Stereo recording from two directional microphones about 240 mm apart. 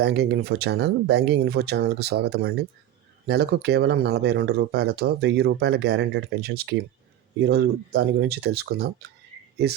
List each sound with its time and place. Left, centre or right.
0.0 s speech: right